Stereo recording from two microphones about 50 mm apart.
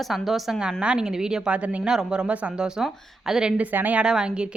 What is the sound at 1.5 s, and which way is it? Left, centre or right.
Speech, right.